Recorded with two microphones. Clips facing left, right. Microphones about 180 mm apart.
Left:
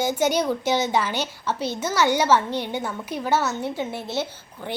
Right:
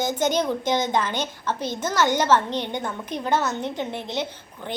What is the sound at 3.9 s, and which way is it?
Speech, 20° right (ahead or behind).